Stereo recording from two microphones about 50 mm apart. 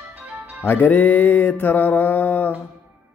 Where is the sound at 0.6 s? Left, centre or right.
Left.